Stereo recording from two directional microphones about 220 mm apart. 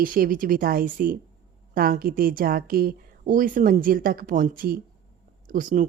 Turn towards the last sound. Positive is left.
turn(degrees=-35)  # may be behind; listen again after turning